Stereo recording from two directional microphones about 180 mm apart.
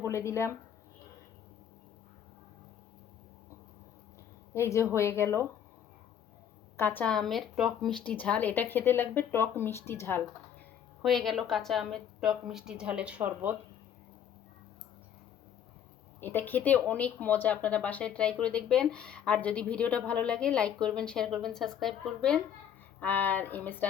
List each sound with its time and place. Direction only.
0.0 s speech: 15° left (ahead or behind)
4.5 s speech: 15° left (ahead or behind)
6.7 s speech: 10° left (ahead or behind)
11.0 s a woman's voice: centre (ahead or behind)
16.2 s a woman's voice: 10° left (ahead or behind)